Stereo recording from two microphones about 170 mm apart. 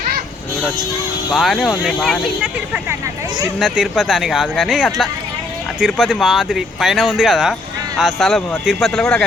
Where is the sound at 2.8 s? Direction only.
20° right (ahead or behind).